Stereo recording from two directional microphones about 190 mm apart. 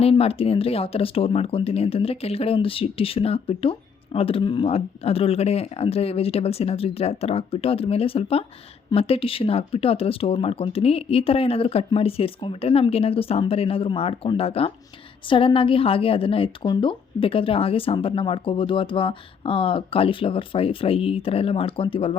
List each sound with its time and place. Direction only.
0.0 s a woman's voice: 30° left (ahead or behind)